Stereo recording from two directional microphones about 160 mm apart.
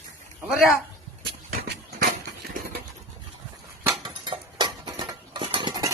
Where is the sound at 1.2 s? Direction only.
90° right.